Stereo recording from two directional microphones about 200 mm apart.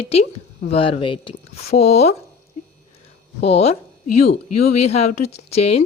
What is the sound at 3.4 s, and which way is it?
Speech, 30° left (ahead or behind).